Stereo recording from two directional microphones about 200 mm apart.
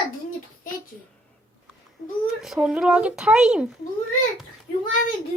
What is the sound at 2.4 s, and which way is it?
Speech, 5° right (ahead or behind).